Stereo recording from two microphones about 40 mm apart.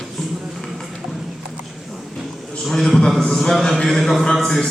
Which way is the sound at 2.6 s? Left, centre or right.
Centre.